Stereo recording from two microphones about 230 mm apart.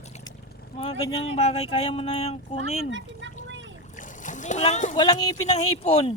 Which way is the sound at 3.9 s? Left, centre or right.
Left.